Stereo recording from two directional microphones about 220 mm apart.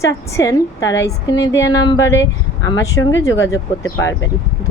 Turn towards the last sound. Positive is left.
turn(degrees=15)  # may be behind; listen again after turning